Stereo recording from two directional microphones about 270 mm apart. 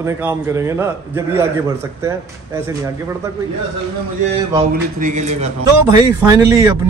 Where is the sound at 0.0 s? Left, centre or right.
Centre.